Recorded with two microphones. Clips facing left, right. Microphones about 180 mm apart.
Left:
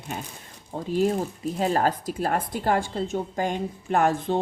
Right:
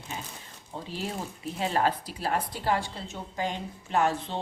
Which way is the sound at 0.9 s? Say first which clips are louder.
Left 12 dB; 45° left (ahead or behind).